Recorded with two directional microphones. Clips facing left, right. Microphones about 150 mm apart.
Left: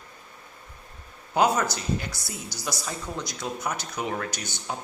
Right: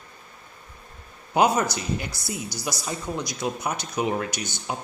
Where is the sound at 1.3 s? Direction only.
15° right (ahead or behind).